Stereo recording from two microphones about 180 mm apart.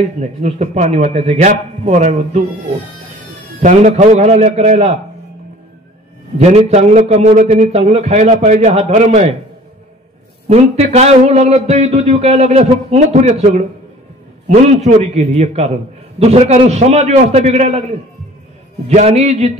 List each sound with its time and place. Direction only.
0.0 s a man's voice: 40° right (ahead or behind)
3.6 s a man's voice: 40° right (ahead or behind)
6.3 s a man's voice: 35° right (ahead or behind)
10.5 s a man's voice: 35° right (ahead or behind)
18.9 s a man's voice: 40° right (ahead or behind)